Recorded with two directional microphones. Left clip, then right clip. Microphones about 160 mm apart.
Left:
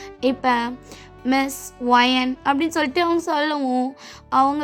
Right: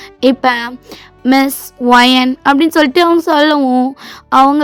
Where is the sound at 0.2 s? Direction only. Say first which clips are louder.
Right 8 dB; 40° right (ahead or behind).